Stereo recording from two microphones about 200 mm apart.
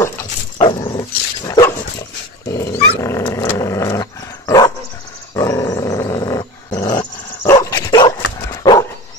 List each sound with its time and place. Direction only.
0.6 s dog: 20° left (ahead or behind)